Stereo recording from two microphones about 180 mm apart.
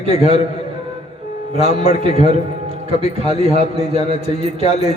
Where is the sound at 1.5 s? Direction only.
35° left (ahead or behind).